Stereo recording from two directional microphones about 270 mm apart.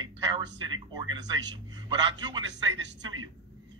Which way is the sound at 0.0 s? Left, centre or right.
Centre.